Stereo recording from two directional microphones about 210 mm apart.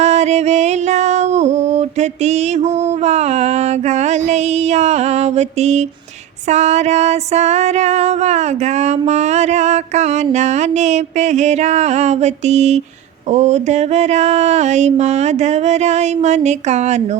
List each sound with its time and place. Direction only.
0.0 s music: 30° right (ahead or behind)